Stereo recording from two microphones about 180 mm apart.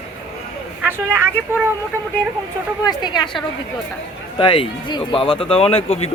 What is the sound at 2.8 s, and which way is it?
Speech, 25° left (ahead or behind).